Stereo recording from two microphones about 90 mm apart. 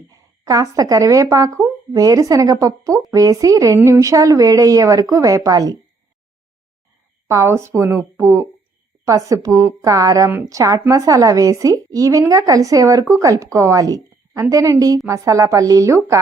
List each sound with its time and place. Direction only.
0.1 s a woman's voice: 40° right (ahead or behind)
7.3 s speech: 30° right (ahead or behind)